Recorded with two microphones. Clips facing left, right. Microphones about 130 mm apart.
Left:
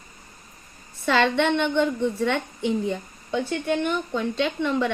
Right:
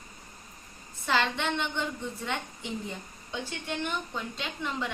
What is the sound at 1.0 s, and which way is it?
A woman's voice, 65° left (ahead or behind).